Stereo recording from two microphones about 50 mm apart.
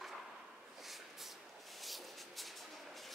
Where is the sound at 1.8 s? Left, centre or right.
Centre.